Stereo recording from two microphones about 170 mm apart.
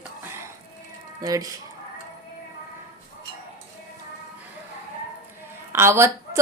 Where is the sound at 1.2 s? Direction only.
20° right (ahead or behind).